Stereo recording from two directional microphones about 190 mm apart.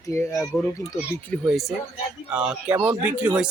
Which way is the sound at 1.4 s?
Centre (ahead or behind).